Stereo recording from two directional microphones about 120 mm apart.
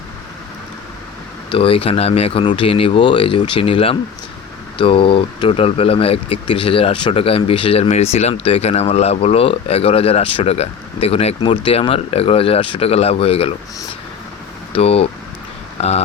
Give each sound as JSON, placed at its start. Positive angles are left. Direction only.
{"t": 1.5, "sound": "speech", "side_deg": 50}
{"t": 14.7, "sound": "speech", "side_deg": 55}